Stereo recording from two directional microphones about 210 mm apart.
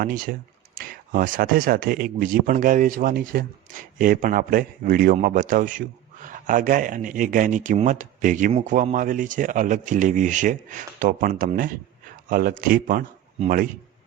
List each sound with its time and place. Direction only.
0.0 s speech: 40° right (ahead or behind)